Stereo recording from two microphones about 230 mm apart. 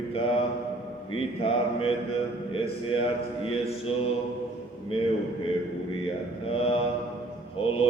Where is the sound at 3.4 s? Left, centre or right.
Left.